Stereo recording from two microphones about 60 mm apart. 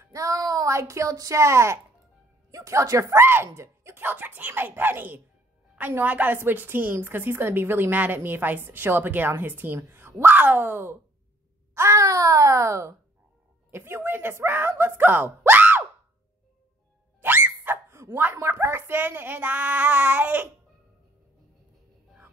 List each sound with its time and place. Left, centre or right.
0.1 s a sound: right
0.7 s speech: right
3.9 s a woman's voice: right
9.8 s a sound: right
10.2 s a woman's voice: right
11.7 s speech: right
13.7 s a woman's voice: right
17.2 s music: right
17.8 s bow-wow: right
18.6 s a child's voice: right